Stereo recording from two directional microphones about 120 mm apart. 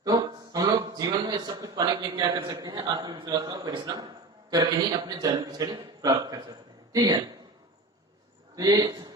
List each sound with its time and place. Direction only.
0.0 s a sound: 30° right (ahead or behind)
2.3 s a man's voice: 35° right (ahead or behind)
3.1 s a man's voice: 40° right (ahead or behind)
3.4 s a man's voice: 30° right (ahead or behind)
8.5 s speech: 30° right (ahead or behind)